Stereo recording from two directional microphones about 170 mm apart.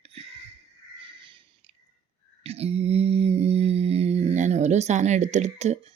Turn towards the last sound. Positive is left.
turn(degrees=-40)  # may be behind; listen again after turning